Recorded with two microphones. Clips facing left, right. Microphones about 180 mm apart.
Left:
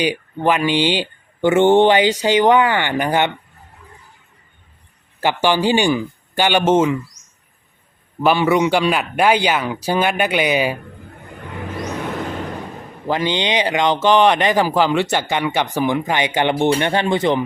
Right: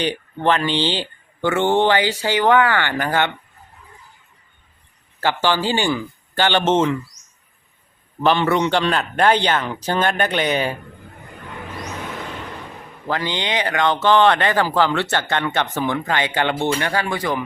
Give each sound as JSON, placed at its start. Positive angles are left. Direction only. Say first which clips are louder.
{"t": 0.0, "sound": "speech", "louder": "left 2 dB", "side_deg": 10}
{"t": 5.2, "sound": "speech", "louder": "left 3 dB", "side_deg": 15}
{"t": 8.2, "sound": "speech", "louder": "left 2 dB", "side_deg": 10}
{"t": 13.1, "sound": "speech", "louder": "left 4 dB", "side_deg": 20}